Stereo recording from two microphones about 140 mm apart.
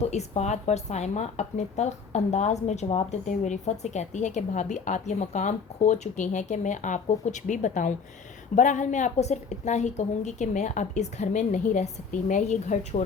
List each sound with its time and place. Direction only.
0.0 s speech: 50° left (ahead or behind)